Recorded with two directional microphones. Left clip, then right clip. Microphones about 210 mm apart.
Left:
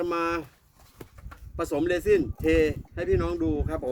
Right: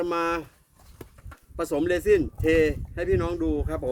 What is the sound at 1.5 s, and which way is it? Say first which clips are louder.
Speech: right 1 dB; centre (ahead or behind).